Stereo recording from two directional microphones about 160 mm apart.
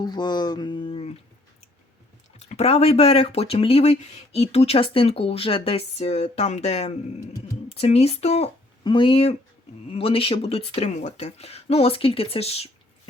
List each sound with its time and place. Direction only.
0.0 s speech: 25° left (ahead or behind)
2.4 s speech: 40° left (ahead or behind)